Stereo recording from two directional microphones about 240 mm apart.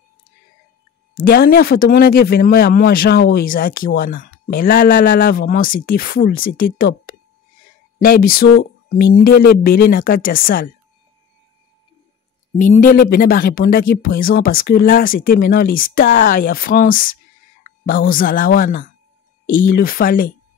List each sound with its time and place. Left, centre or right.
1.1 s speech: left
12.5 s speech: left